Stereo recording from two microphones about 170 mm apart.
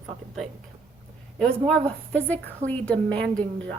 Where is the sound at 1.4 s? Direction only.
5° left (ahead or behind).